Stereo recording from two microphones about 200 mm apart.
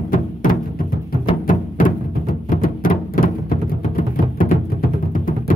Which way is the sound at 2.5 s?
45° left (ahead or behind).